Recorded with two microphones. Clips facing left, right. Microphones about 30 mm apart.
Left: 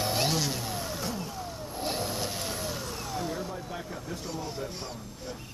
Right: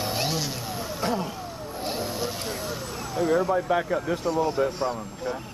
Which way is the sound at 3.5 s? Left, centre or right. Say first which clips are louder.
Right 14 dB; right.